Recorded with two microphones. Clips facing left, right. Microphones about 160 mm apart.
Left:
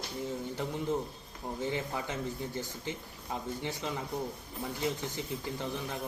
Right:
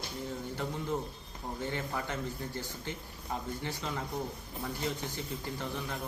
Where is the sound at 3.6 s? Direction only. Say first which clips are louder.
Left 1 dB; 15° left (ahead or behind).